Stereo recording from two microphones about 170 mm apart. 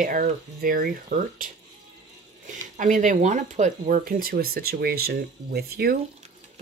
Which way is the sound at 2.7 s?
45° right (ahead or behind).